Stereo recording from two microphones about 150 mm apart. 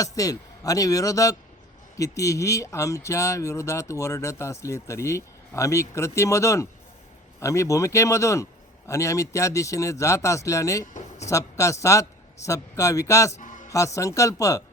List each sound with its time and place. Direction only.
0.0 s speech: 25° left (ahead or behind)